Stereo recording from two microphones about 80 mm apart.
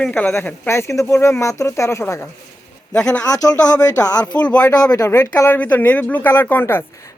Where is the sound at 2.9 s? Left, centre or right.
Centre.